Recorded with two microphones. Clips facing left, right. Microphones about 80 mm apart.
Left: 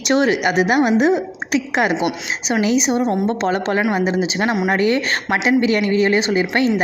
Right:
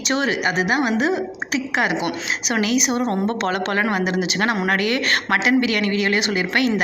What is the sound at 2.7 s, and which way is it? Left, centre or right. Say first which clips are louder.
Speech: left 5 dB; left.